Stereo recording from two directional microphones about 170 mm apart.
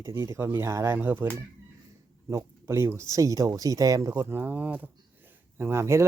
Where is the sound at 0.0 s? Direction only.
15° right (ahead or behind).